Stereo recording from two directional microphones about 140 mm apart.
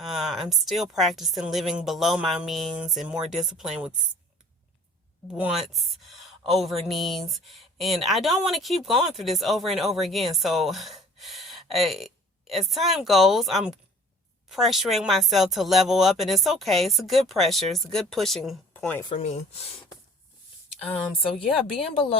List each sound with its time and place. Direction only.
0.0 s speech: centre (ahead or behind)
5.3 s speech: 5° right (ahead or behind)
18.7 s speech: 10° left (ahead or behind)
19.0 s speech: 45° left (ahead or behind)